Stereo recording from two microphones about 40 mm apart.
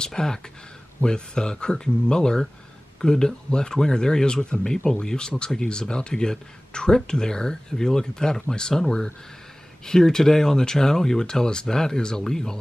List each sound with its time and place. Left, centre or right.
0.0 s speech: centre
9.8 s speech: centre